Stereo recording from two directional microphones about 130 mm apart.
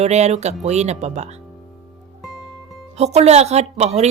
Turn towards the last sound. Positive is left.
turn(degrees=-60)  # may be behind; listen again after turning